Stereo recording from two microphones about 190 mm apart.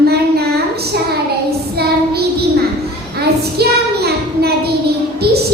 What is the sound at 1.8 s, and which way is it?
Child singing, 55° right (ahead or behind).